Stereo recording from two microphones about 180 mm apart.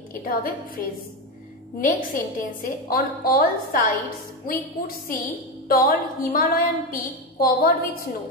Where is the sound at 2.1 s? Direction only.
50° left (ahead or behind).